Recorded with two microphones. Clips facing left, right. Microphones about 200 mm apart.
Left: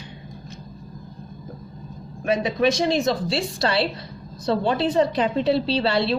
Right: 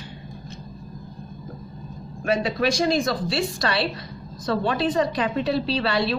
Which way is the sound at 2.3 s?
20° left (ahead or behind).